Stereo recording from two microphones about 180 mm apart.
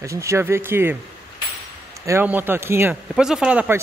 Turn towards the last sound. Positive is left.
turn(degrees=-5)  # may be behind; listen again after turning